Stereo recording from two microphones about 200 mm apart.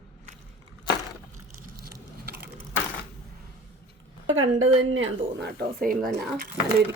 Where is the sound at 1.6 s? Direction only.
50° right (ahead or behind).